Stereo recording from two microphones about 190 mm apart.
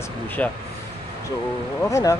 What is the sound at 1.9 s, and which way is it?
Speech, 15° left (ahead or behind).